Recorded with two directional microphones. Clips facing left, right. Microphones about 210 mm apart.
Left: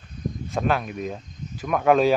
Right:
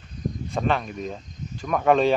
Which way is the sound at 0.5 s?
5° left (ahead or behind).